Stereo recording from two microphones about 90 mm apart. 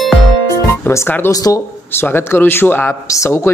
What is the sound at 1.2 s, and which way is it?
Speech, 40° left (ahead or behind).